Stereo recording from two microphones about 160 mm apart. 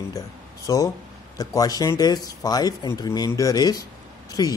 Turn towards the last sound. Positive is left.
turn(degrees=25)  # may be behind; listen again after turning